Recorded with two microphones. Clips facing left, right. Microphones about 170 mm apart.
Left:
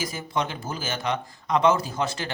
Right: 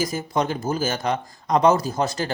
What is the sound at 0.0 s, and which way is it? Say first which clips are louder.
Speech: right 5 dB; 40° right (ahead or behind).